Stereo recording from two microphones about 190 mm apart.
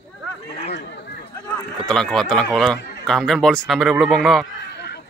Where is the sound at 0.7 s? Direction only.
60° left (ahead or behind).